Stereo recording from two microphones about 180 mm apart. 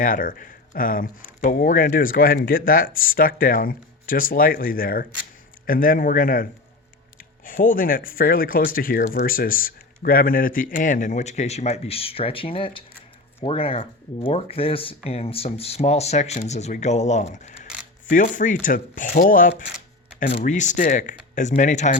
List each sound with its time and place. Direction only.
0.0 s speech: 50° left (ahead or behind)